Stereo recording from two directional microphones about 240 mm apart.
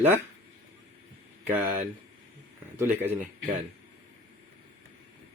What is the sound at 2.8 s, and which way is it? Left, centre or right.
Speech, centre.